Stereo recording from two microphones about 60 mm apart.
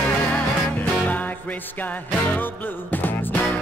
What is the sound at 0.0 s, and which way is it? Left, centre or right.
Music, left.